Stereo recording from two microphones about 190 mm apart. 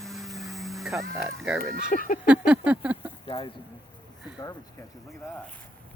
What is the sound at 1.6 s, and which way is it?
Speech, 45° left (ahead or behind).